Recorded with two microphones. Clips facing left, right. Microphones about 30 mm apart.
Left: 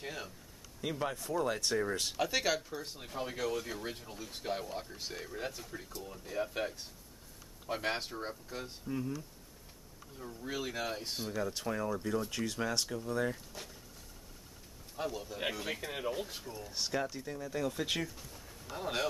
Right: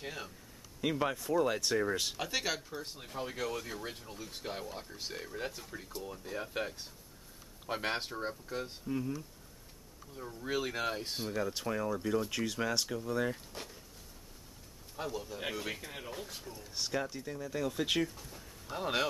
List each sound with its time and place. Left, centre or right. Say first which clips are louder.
0.0 s speech: even; centre
0.7 s speech: right 4 dB; centre
1.6 s speech: right 1 dB; centre
10.1 s speech: right 4 dB; centre
15.0 s speech: left 1 dB; centre
15.8 s speech: left 6 dB; centre
18.3 s bird: right 1 dB; centre
18.7 s speech: right 3 dB; centre